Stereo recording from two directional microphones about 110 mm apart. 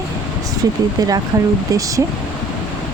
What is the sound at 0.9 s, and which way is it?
Speech, 35° right (ahead or behind).